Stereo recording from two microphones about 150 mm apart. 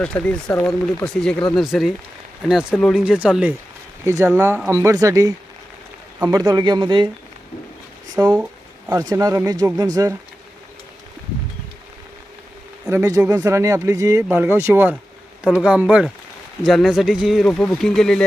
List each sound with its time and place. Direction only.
0.0 s speech: 10° left (ahead or behind); by 7.1 s 30° right (ahead or behind)
8.1 s speech: 25° right (ahead or behind)
12.9 s speech: 20° right (ahead or behind); by 18.2 s 5° left (ahead or behind)